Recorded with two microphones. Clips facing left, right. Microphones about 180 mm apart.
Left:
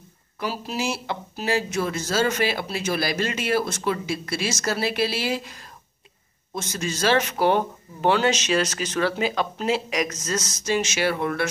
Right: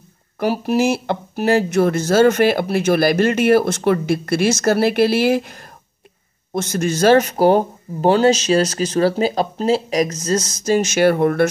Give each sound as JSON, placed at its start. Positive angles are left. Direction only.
{"t": 0.4, "sound": "speech", "side_deg": -60}